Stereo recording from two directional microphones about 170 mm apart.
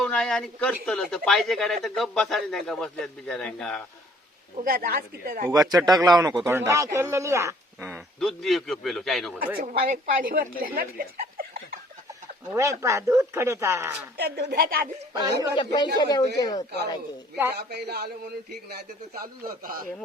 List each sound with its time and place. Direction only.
0.0 s speech: 5° left (ahead or behind)
4.6 s speech: 60° right (ahead or behind)
5.5 s speech: 20° right (ahead or behind)
7.9 s speech: centre (ahead or behind)
9.6 s speech: 55° right (ahead or behind)
12.8 s speech: 15° right (ahead or behind)
14.2 s a man's voice: 75° right (ahead or behind)
15.1 s speech: 20° right (ahead or behind)
15.5 s speech: 25° left (ahead or behind)
17.5 s a man's voice: 75° right (ahead or behind); by 19.8 s 60° right (ahead or behind)